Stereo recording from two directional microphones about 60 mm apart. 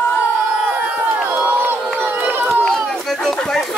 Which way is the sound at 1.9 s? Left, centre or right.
Right.